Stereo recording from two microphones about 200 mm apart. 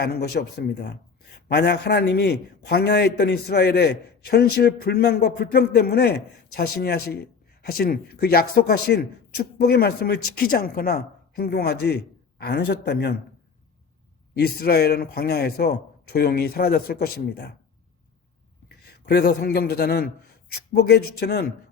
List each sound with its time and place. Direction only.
0.0 s speech: 55° left (ahead or behind)
14.3 s speech: 55° left (ahead or behind)
18.9 s speech: 55° left (ahead or behind)